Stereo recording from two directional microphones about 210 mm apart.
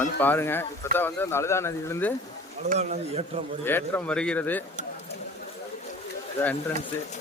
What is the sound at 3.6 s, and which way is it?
Speech, 10° left (ahead or behind).